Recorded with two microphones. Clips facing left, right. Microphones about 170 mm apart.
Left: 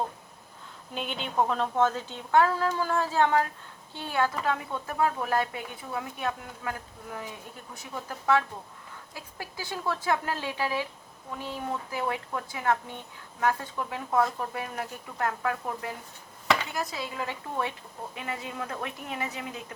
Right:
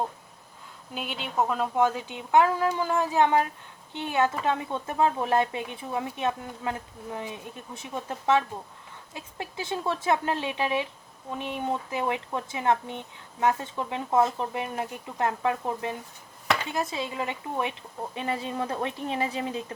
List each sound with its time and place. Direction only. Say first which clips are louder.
0.9 s a woman's voice: even; 5° right (ahead or behind); by 19.6 s 30° right (ahead or behind)